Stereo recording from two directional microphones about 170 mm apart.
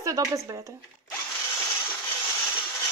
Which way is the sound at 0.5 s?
20° right (ahead or behind).